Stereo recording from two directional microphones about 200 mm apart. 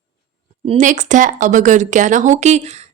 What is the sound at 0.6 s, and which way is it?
A woman's voice, 35° right (ahead or behind).